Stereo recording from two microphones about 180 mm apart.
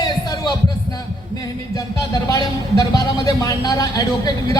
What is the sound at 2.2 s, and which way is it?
Speech, 20° left (ahead or behind).